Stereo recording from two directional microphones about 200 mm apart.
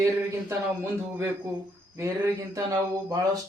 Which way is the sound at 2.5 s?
15° right (ahead or behind).